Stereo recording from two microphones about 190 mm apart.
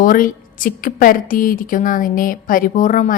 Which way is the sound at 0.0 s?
45° left (ahead or behind).